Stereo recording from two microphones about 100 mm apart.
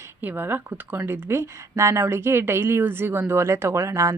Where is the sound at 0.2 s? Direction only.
20° right (ahead or behind).